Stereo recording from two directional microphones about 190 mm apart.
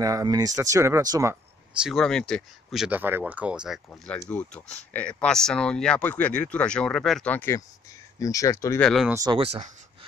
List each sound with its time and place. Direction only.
0.0 s speech: 20° right (ahead or behind)
1.3 s speech: 5° right (ahead or behind); by 8.8 s 15° left (ahead or behind)
8.8 s speech: centre (ahead or behind)
9.1 s speech: 20° right (ahead or behind)
9.4 s speech: 30° right (ahead or behind)